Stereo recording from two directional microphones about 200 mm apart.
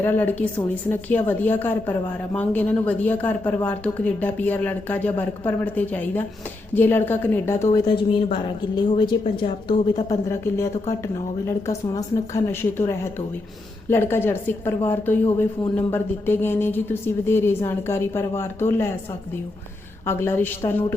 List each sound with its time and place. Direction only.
0.0 s a woman's voice: 10° left (ahead or behind)
7.7 s a woman's voice: 25° left (ahead or behind)
20.1 s a woman's voice: 10° left (ahead or behind)